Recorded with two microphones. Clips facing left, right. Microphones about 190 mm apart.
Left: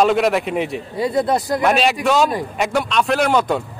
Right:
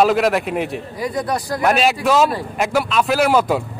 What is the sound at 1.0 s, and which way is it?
Speech, 25° left (ahead or behind).